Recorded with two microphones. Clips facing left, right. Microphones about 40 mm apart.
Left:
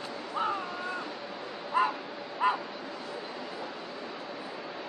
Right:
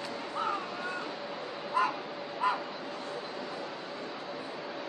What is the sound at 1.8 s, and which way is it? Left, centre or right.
Bow-wow, left.